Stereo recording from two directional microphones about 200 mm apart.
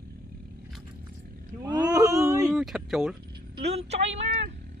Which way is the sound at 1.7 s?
20° right (ahead or behind).